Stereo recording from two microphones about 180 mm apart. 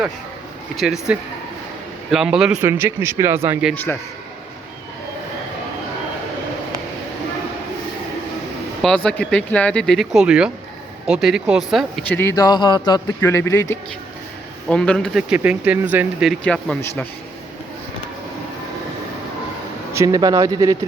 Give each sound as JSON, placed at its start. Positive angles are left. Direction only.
{"t": 1.1, "sound": "speech", "side_deg": -5}
{"t": 8.8, "sound": "speech", "side_deg": 5}
{"t": 14.7, "sound": "speech", "side_deg": 5}
{"t": 19.9, "sound": "speech", "side_deg": -20}